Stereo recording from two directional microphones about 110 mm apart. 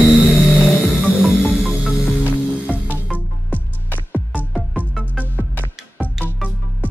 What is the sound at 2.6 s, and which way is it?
Music, 10° right (ahead or behind).